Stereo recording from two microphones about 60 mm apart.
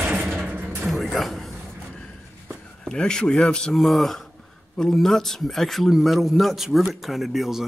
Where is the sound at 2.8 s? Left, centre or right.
Centre.